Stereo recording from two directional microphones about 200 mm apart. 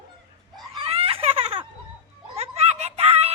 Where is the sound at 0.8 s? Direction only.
30° right (ahead or behind).